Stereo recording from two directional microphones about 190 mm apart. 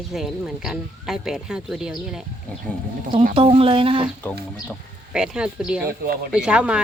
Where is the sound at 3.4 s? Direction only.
30° right (ahead or behind).